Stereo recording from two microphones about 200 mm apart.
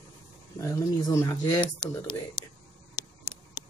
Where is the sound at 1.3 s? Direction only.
20° left (ahead or behind).